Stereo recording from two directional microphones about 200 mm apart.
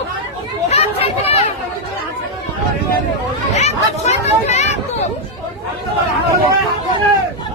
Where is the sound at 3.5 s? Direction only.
35° left (ahead or behind).